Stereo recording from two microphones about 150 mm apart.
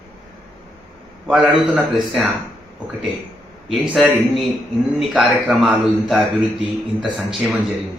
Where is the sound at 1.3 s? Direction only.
Centre (ahead or behind).